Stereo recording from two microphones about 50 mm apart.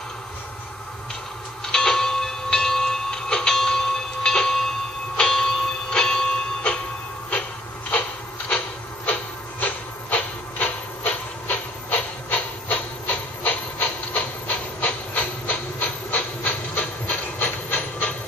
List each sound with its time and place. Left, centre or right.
1.7 s train: centre
8.5 s train: left